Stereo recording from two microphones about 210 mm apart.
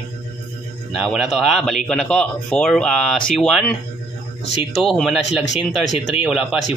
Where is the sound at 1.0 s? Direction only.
Centre (ahead or behind).